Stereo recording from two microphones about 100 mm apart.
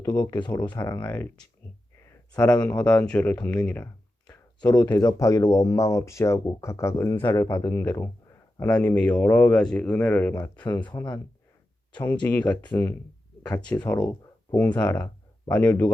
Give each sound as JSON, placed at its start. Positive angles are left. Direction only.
{"t": 0.0, "sound": "speech", "side_deg": 40}
{"t": 1.0, "sound": "speech", "side_deg": 20}
{"t": 2.3, "sound": "speech", "side_deg": 10}
{"t": 4.3, "sound": "a sound", "side_deg": 15}
{"t": 4.9, "sound": "speech", "side_deg": 30}
{"t": 8.5, "sound": "speech", "side_deg": 15}
{"t": 12.2, "sound": "speech", "side_deg": 15}